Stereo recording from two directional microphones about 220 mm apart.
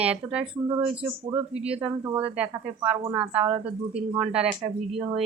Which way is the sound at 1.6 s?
5° right (ahead or behind).